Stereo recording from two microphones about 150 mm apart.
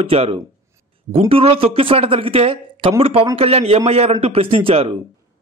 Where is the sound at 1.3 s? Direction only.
40° right (ahead or behind).